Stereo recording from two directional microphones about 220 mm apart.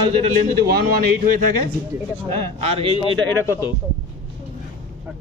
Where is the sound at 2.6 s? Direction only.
25° right (ahead or behind).